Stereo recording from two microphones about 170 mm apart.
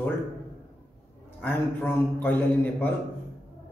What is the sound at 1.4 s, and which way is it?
A man's voice, 10° left (ahead or behind).